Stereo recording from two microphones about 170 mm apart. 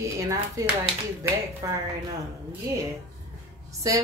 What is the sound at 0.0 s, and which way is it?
Speech, 20° right (ahead or behind).